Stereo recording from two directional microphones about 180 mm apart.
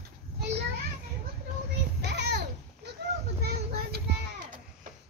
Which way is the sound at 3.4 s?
65° right (ahead or behind).